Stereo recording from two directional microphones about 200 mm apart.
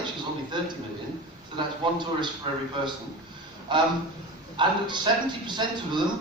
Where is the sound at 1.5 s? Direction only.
25° right (ahead or behind).